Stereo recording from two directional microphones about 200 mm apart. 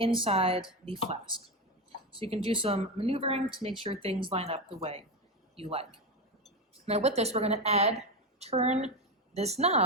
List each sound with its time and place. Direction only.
0.2 s speech: 30° right (ahead or behind)
6.8 s a woman's voice: 30° right (ahead or behind)